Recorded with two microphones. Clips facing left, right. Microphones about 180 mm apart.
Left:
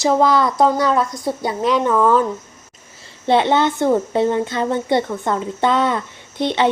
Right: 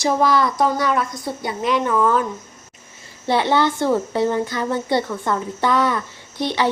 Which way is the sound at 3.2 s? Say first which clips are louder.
Left 3 dB; 20° left (ahead or behind).